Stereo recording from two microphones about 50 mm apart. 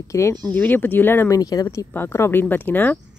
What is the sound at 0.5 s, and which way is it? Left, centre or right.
Speech, left.